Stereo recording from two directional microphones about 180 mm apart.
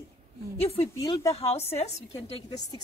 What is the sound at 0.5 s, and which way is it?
A woman's voice, 35° left (ahead or behind).